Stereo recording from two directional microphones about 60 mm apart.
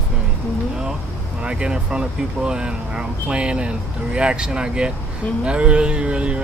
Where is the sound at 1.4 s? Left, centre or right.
Centre.